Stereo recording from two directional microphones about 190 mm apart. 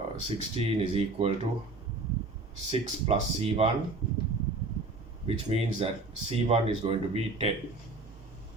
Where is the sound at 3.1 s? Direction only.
30° right (ahead or behind).